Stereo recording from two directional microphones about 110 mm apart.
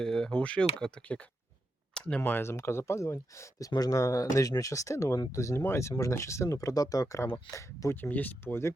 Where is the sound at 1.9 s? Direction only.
10° left (ahead or behind).